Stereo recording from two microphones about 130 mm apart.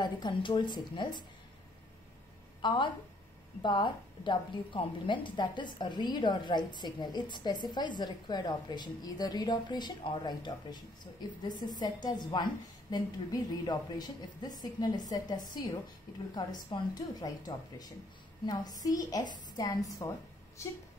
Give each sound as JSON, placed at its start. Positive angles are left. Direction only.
{"t": 0.0, "sound": "a woman's voice", "side_deg": 35}
{"t": 2.6, "sound": "a woman's voice", "side_deg": 35}
{"t": 11.8, "sound": "a woman's voice", "side_deg": 30}